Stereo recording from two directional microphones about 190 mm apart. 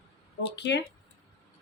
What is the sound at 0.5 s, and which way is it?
Speech, 65° left (ahead or behind).